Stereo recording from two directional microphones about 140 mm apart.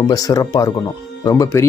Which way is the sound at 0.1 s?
25° left (ahead or behind).